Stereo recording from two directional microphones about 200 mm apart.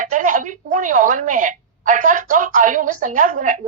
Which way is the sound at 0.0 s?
40° right (ahead or behind).